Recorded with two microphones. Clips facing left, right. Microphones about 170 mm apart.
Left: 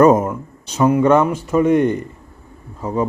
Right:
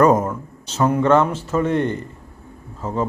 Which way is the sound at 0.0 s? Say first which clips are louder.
Left 3 dB; 20° left (ahead or behind).